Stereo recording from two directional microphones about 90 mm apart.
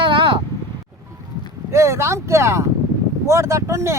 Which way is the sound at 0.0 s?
65° right (ahead or behind).